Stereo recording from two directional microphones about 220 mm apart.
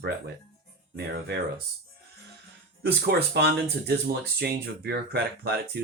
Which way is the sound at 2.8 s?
45° right (ahead or behind).